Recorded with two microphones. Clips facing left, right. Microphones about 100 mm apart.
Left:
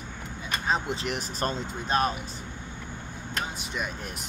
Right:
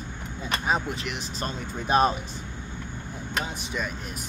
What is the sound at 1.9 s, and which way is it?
Speech, 15° right (ahead or behind).